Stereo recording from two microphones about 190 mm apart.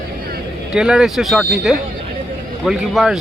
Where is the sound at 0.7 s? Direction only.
5° right (ahead or behind).